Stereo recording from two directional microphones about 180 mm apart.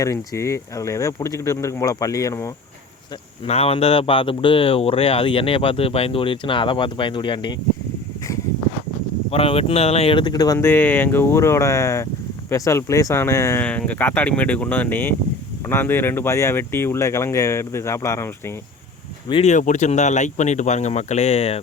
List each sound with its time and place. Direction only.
0.0 s speech: 15° left (ahead or behind)
3.4 s speech: 35° left (ahead or behind)
9.3 s speech: 30° left (ahead or behind); by 18.5 s 15° left (ahead or behind)
19.3 s speech: 35° left (ahead or behind)